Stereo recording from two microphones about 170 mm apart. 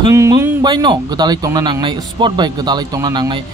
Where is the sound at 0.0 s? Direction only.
20° right (ahead or behind).